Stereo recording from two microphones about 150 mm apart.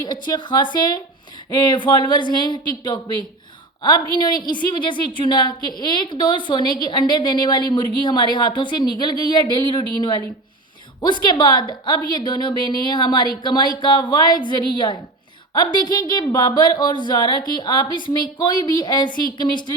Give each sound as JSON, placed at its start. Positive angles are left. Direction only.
{"t": 0.0, "sound": "a woman's voice", "side_deg": 30}
{"t": 4.6, "sound": "a woman's voice", "side_deg": 30}